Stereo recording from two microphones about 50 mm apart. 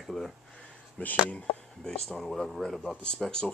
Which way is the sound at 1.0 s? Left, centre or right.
Left.